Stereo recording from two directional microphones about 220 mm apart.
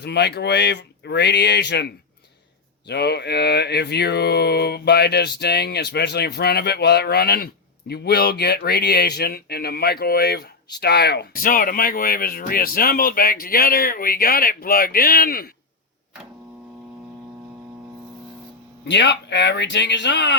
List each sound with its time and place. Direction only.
0.0 s mantra: 50° left (ahead or behind)
18.9 s mantra: 55° left (ahead or behind)